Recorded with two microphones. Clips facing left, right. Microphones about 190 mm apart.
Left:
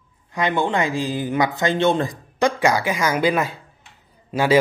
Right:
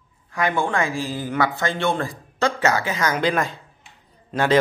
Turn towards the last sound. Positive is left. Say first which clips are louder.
# left 2 dB
turn(degrees=10)  # may be behind; listen again after turning